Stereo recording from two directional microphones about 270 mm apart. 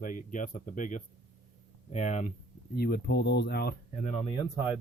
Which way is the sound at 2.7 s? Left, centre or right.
Left.